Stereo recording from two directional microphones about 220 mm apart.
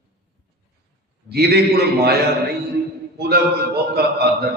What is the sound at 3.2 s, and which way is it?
A man's voice, 45° right (ahead or behind).